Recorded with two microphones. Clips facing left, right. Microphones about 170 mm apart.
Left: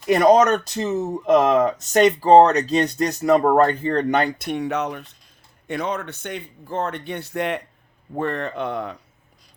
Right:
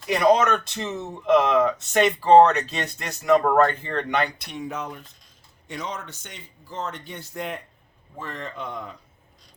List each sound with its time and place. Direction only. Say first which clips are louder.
0.1 s speech: left 4 dB; 45° left (ahead or behind); by 5.1 s 75° left (ahead or behind)
5.6 s speech: left 7 dB; 60° left (ahead or behind)